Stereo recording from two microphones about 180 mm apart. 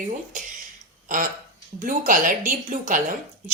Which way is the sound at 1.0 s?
50° right (ahead or behind).